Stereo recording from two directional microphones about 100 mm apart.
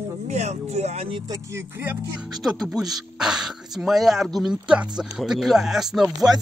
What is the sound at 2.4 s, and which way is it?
Speech, centre (ahead or behind).